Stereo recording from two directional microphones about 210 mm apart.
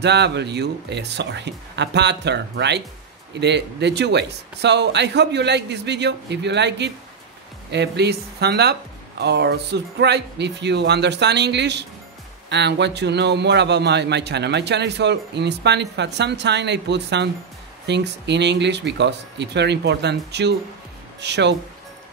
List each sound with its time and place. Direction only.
0.0 s a man's voice: 55° right (ahead or behind)